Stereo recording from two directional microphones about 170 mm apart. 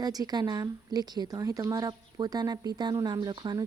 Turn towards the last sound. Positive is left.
turn(degrees=-25)  # may be behind; listen again after turning